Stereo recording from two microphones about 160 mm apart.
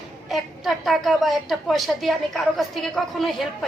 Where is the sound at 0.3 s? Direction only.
Centre (ahead or behind).